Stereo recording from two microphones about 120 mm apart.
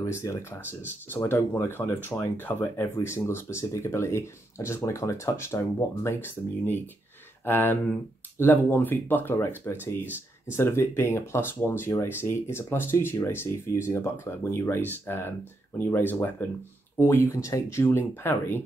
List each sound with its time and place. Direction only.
0.0 s speech: 25° left (ahead or behind)